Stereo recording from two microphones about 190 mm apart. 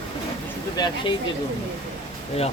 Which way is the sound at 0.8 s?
20° left (ahead or behind).